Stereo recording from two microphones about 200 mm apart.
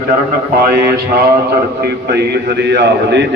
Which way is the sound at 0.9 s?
50° right (ahead or behind).